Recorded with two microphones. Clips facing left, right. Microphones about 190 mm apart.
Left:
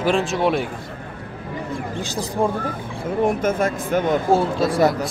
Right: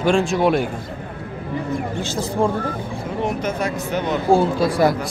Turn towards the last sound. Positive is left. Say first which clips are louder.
# right 1 dB
turn(degrees=0)  # may be behind; listen again after turning